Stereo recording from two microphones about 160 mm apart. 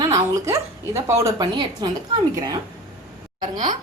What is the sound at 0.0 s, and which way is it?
A woman's voice, 20° right (ahead or behind).